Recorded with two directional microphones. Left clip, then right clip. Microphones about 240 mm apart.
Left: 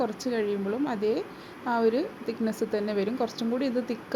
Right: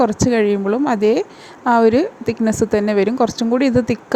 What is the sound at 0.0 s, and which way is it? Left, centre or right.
A woman's voice, right.